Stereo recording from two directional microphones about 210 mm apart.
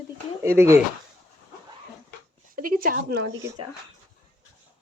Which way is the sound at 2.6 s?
40° right (ahead or behind).